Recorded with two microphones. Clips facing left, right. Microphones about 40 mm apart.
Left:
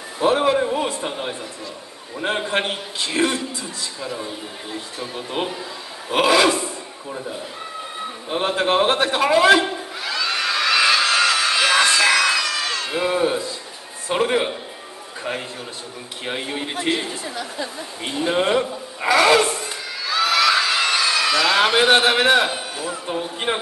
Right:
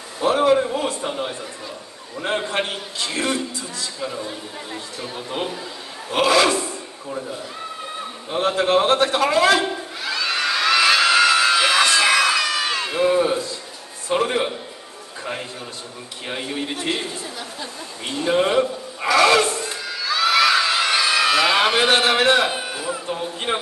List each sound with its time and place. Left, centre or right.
0.2 s a man's voice: centre
2.2 s a man's voice: centre
5.3 s a man's voice: centre
8.3 s a man's voice: centre
10.1 s a sound: centre
11.8 s crowd: centre
12.9 s a man's voice: centre
16.3 s a man's voice: centre
18.2 s speech: centre
20.3 s crowd: centre
21.7 s a man's voice: centre
22.5 s a man's voice: centre
23.5 s a man's voice: centre